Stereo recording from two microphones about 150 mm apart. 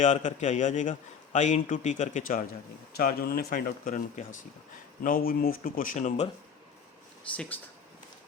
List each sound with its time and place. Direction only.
0.0 s a man's voice: 55° left (ahead or behind)
2.9 s speech: 90° left; by 4.4 s 60° left (ahead or behind)
5.0 s speech: 70° left (ahead or behind); by 6.2 s 55° left (ahead or behind)